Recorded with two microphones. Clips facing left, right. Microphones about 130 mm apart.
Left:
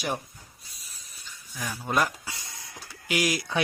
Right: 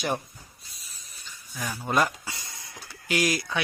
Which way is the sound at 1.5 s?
5° right (ahead or behind).